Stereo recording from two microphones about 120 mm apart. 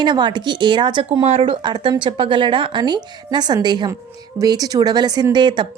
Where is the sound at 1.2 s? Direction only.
55° right (ahead or behind).